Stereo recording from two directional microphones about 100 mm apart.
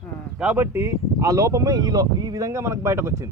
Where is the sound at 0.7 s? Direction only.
30° right (ahead or behind).